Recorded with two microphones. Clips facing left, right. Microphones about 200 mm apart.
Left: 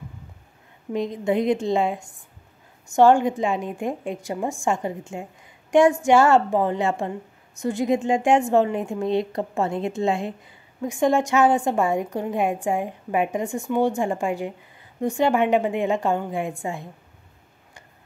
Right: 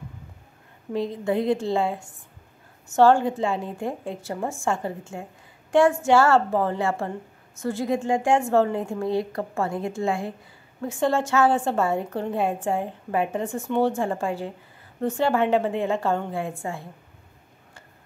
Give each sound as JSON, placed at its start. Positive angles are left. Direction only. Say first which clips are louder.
{"t": 0.9, "sound": "a woman's voice", "louder": "left 2 dB", "side_deg": 15}
{"t": 5.7, "sound": "female singing", "louder": "left 2 dB", "side_deg": 15}
{"t": 6.0, "sound": "a woman's voice", "louder": "left 2 dB", "side_deg": 15}